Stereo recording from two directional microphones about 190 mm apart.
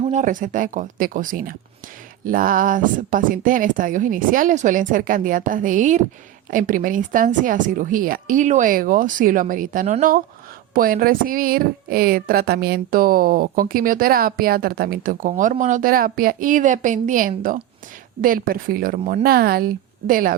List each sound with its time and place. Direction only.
0.0 s a woman's voice: 40° right (ahead or behind)